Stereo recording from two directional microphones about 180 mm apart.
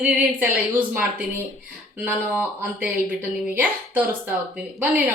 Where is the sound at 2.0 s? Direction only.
10° right (ahead or behind).